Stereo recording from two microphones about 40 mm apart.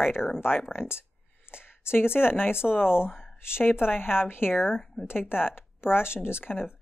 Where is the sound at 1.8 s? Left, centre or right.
Left.